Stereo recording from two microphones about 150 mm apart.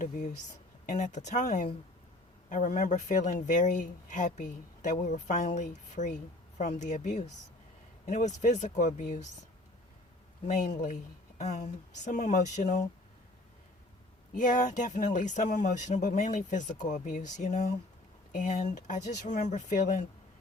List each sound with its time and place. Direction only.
0.0 s a woman's voice: 60° left (ahead or behind)
10.4 s a woman's voice: 55° left (ahead or behind)
14.3 s speech: 55° left (ahead or behind)